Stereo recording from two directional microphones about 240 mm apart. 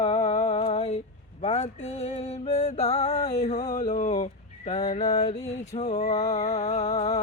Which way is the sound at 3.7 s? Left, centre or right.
Left.